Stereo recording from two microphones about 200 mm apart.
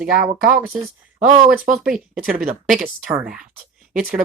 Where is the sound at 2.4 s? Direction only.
Centre (ahead or behind).